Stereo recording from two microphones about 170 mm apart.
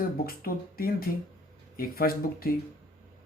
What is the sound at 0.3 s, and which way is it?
Speech, 60° left (ahead or behind).